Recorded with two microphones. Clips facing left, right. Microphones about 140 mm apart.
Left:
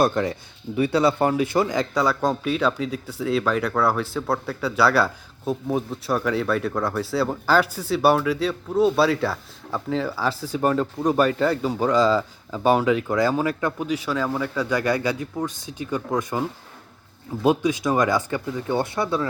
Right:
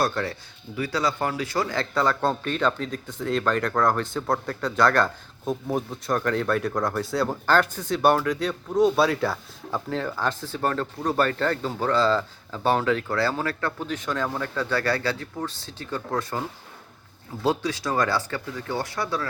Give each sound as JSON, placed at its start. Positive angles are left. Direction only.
{"t": 0.0, "sound": "speech", "side_deg": 20}